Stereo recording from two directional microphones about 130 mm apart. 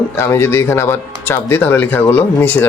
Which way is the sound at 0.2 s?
20° left (ahead or behind).